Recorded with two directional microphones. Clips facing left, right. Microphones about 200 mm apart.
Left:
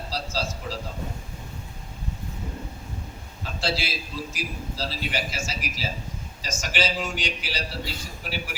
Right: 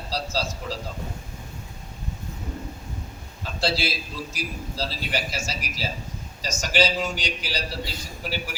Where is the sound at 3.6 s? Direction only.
40° right (ahead or behind).